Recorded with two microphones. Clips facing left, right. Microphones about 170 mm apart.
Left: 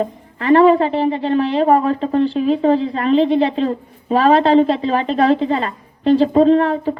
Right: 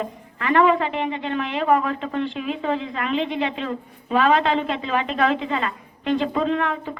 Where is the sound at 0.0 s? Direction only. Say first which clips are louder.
Left 7 dB; 35° left (ahead or behind).